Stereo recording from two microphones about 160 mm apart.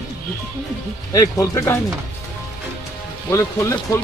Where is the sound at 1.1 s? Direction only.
20° left (ahead or behind).